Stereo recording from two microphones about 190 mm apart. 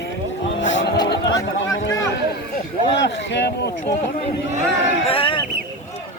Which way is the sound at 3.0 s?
65° left (ahead or behind).